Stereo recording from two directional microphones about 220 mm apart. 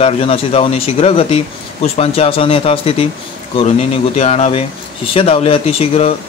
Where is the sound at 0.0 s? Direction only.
25° left (ahead or behind).